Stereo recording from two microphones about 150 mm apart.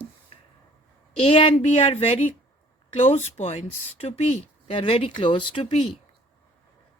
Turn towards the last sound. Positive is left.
turn(degrees=35)  # may be behind; listen again after turning